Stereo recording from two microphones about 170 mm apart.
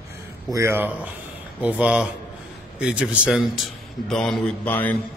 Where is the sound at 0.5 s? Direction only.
15° right (ahead or behind); by 5.0 s 10° left (ahead or behind).